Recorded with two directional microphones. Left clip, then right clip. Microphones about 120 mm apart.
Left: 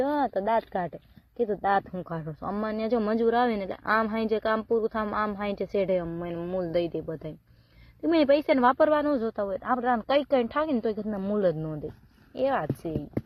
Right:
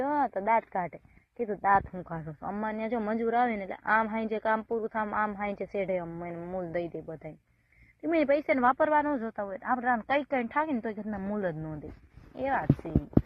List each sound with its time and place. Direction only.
0.0 s speech: 10° left (ahead or behind)
2.5 s a woman's voice: 25° left (ahead or behind)